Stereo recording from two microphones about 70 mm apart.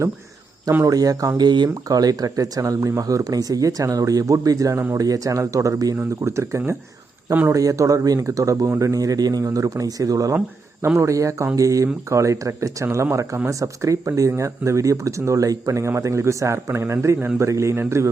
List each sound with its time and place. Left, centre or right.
0.9 s speech: right
1.4 s speech: right
7.5 s speech: right
10.9 s speech: right
13.5 s speech: right